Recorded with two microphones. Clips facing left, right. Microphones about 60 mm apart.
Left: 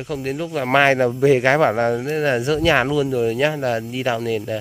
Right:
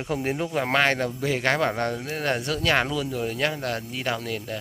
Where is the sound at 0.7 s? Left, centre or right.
Centre.